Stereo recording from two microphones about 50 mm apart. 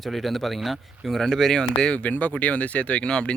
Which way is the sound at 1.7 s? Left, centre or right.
Left.